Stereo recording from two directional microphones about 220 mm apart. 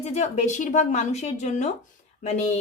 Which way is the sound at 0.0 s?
30° left (ahead or behind).